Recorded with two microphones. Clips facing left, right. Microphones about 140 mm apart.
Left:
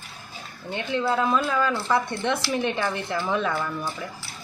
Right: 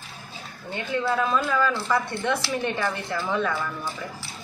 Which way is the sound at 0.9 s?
15° left (ahead or behind).